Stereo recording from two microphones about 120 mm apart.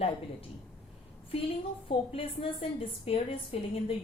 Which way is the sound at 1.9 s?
50° left (ahead or behind).